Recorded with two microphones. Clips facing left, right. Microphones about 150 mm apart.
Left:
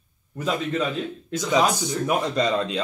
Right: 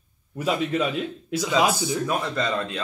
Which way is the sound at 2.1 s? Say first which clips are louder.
Left 3 dB; 20° left (ahead or behind).